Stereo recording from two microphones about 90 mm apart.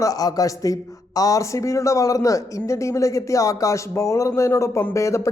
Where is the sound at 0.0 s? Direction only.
40° left (ahead or behind).